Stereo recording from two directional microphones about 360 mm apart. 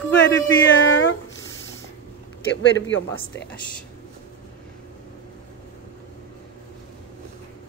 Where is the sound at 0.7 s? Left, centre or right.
Left.